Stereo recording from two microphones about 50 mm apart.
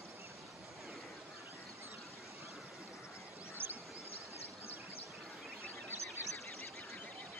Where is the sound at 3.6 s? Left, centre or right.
Right.